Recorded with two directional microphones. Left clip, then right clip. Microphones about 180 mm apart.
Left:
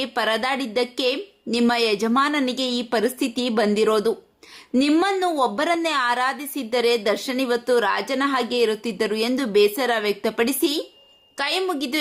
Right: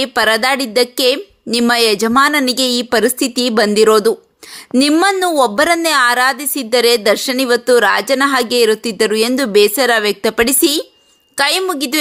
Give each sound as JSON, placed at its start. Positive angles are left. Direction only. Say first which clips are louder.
{"t": 0.0, "sound": "a woman's voice", "louder": "right 9 dB", "side_deg": -25}